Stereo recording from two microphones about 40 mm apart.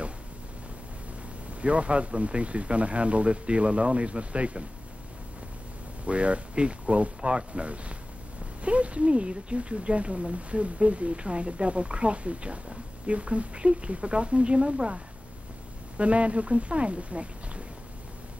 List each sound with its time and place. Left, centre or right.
1.6 s speech: right
6.0 s speech: right
16.0 s speech: right